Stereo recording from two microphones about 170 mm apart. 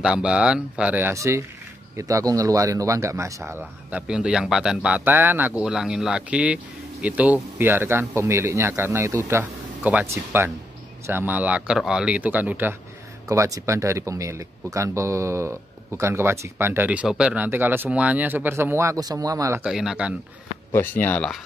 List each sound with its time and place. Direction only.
0.0 s speech: 5° right (ahead or behind)
19.6 s speech: centre (ahead or behind)
20.7 s speech: 10° left (ahead or behind)